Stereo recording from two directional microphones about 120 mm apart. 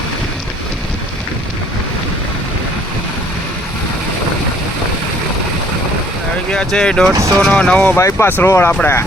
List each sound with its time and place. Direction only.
6.5 s speech: 5° left (ahead or behind)
7.1 s speech: 25° right (ahead or behind)
7.4 s speech: 10° left (ahead or behind)
7.9 s speech: 20° left (ahead or behind)